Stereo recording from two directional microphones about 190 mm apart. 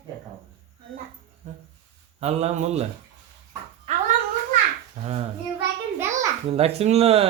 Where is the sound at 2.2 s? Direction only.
35° right (ahead or behind).